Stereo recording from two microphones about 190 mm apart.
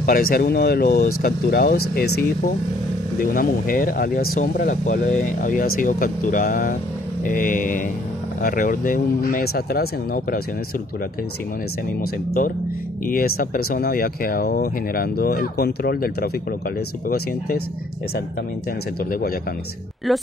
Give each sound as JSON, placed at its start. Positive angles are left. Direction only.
{"t": 0.0, "sound": "speech", "side_deg": 50}
{"t": 12.0, "sound": "speech", "side_deg": 50}
{"t": 20.1, "sound": "speech", "side_deg": 0}